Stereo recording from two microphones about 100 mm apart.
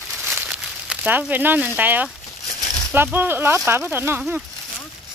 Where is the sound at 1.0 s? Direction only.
20° right (ahead or behind).